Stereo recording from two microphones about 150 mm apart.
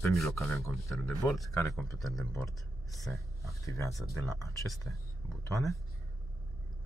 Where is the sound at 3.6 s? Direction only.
20° left (ahead or behind).